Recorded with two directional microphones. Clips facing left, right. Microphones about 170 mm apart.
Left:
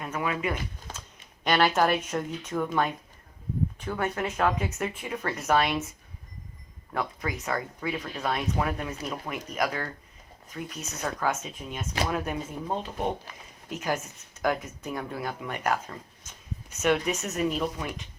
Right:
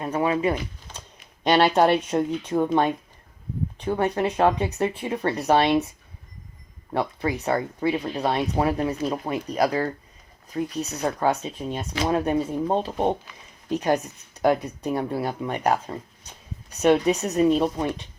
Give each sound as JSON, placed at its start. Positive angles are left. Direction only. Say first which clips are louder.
{"t": 0.0, "sound": "a sound", "louder": "right 7 dB", "side_deg": -30}
{"t": 1.5, "sound": "speech", "louder": "right 5 dB", "side_deg": -30}
{"t": 6.9, "sound": "speech", "louder": "right 6 dB", "side_deg": -30}